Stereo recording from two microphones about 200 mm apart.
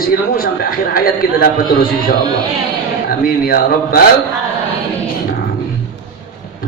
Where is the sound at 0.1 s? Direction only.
45° left (ahead or behind).